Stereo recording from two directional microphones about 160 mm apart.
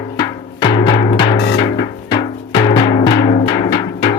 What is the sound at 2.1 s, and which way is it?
Music, 30° left (ahead or behind).